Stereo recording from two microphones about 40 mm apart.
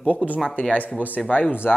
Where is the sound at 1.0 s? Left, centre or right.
Left.